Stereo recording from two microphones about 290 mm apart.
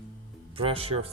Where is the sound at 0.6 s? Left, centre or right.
Centre.